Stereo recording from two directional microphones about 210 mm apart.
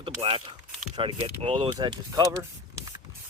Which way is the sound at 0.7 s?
5° right (ahead or behind).